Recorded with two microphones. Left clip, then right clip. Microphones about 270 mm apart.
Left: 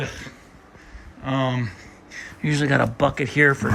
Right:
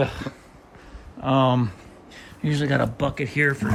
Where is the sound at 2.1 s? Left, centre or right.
Centre.